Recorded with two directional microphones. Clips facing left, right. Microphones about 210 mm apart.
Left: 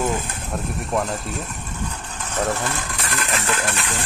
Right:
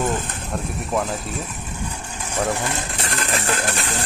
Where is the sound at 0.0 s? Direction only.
Centre (ahead or behind).